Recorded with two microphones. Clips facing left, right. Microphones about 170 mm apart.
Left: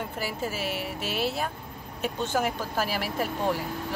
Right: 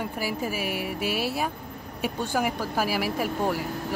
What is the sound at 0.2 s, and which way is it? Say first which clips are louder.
Speech: right 2 dB; 10° right (ahead or behind).